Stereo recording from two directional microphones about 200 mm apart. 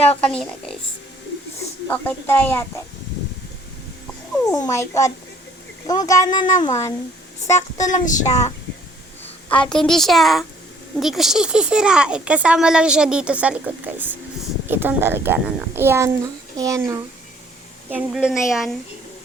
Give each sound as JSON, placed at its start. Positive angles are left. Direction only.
{"t": 0.2, "sound": "speech", "side_deg": 5}
{"t": 1.9, "sound": "a child's voice", "side_deg": 10}
{"t": 4.4, "sound": "a child's voice", "side_deg": 15}
{"t": 8.0, "sound": "a sound", "side_deg": 40}
{"t": 9.5, "sound": "a child's voice", "side_deg": 5}